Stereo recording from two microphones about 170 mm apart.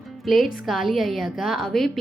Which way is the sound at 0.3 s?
Centre (ahead or behind).